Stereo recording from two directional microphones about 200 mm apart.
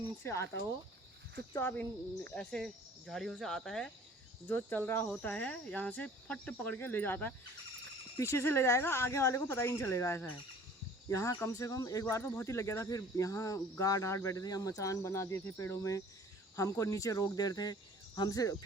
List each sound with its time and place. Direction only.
0.2 s speech: 15° left (ahead or behind)
1.5 s speech: 10° left (ahead or behind)